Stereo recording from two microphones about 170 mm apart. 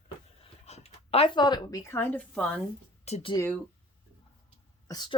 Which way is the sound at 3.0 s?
40° left (ahead or behind).